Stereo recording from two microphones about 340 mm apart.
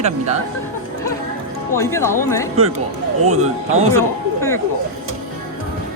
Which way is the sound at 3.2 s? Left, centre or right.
Centre.